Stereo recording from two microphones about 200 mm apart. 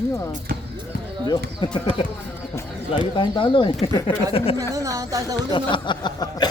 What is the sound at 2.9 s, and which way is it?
Speech, 25° left (ahead or behind).